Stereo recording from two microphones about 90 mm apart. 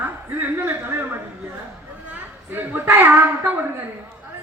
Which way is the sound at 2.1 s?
20° right (ahead or behind).